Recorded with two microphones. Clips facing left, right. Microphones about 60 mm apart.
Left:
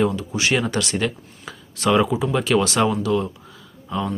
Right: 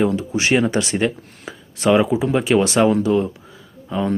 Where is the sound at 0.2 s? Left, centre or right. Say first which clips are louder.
Right 4 dB; right.